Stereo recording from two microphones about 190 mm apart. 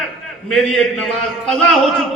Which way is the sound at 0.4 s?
Centre (ahead or behind).